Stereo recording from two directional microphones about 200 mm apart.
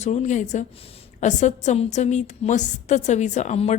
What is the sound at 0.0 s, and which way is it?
A woman's voice, 35° left (ahead or behind).